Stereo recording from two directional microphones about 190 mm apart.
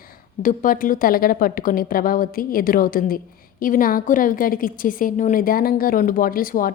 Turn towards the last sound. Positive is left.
turn(degrees=50)  # may be behind; listen again after turning